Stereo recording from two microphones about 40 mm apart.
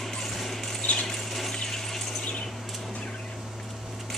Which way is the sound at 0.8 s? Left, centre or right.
Left.